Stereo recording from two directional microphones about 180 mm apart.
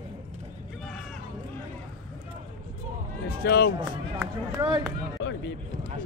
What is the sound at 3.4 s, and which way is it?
Speech, 70° left (ahead or behind).